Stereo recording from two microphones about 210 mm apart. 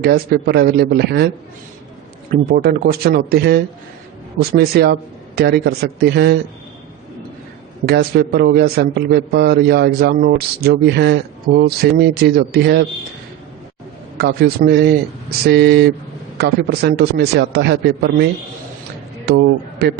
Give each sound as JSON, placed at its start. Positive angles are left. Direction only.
{"t": 0.0, "sound": "a man's voice", "side_deg": -50}
{"t": 2.5, "sound": "a man's voice", "side_deg": -45}
{"t": 7.9, "sound": "a man's voice", "side_deg": -50}
{"t": 14.2, "sound": "a man's voice", "side_deg": -50}